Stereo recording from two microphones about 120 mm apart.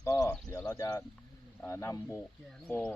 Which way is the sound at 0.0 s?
30° left (ahead or behind).